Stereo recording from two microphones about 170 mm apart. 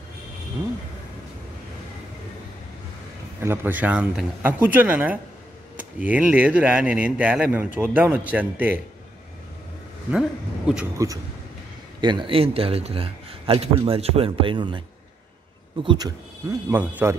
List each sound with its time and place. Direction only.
3.3 s speech: 10° right (ahead or behind)
11.0 s a man's voice: 20° right (ahead or behind)
15.8 s speech: 25° right (ahead or behind)